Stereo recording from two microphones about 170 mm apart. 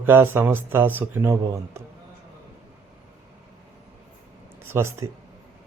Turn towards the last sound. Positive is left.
turn(degrees=-15)  # may be behind; listen again after turning